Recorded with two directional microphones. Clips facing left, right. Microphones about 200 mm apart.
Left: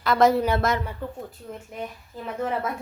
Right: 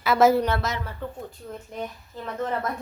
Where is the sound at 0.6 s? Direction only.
55° left (ahead or behind).